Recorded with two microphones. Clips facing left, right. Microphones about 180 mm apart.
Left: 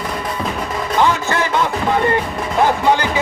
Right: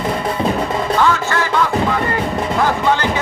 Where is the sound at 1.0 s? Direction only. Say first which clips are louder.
Left 2 dB; 20° left (ahead or behind).